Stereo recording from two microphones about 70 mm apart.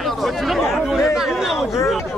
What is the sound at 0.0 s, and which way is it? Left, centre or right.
Chatter, centre.